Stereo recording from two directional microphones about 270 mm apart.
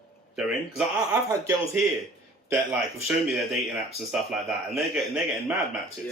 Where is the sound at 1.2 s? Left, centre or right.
Centre.